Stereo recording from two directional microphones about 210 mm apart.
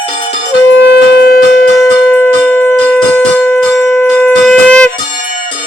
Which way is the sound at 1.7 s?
5° left (ahead or behind).